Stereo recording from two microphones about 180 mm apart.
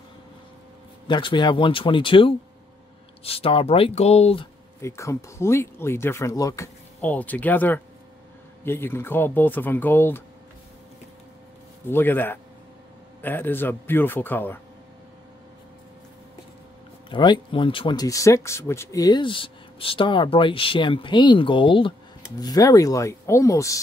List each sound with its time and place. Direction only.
1.0 s speech: 25° left (ahead or behind)
4.8 s speech: 15° left (ahead or behind)
11.9 s speech: 10° left (ahead or behind)
17.1 s speech: 25° left (ahead or behind)